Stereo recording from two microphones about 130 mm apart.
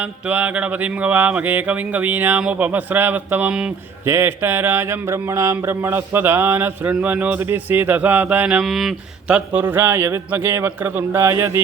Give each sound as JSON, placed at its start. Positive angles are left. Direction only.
{"t": 0.3, "sound": "speech", "side_deg": -10}
{"t": 8.6, "sound": "speech", "side_deg": 0}
{"t": 9.3, "sound": "speech", "side_deg": -15}